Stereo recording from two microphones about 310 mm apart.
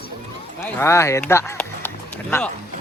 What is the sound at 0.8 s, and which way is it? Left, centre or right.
Speech, centre.